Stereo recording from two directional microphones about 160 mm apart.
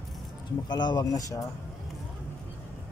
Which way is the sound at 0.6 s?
25° left (ahead or behind).